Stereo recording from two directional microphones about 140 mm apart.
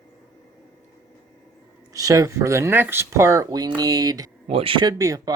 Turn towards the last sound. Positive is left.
turn(degrees=-25)  # may be behind; listen again after turning